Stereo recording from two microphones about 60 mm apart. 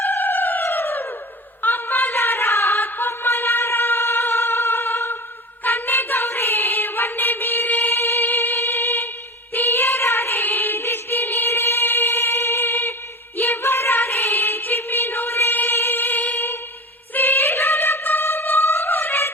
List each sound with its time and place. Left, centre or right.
0.0 s a sound: left
5.6 s music: left
7.9 s music: left